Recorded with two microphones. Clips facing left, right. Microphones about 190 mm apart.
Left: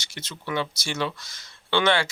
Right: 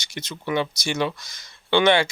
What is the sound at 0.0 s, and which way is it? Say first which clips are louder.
Speech: right 5 dB; 15° right (ahead or behind).